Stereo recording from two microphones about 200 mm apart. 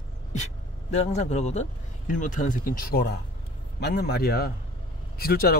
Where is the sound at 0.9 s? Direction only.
35° left (ahead or behind).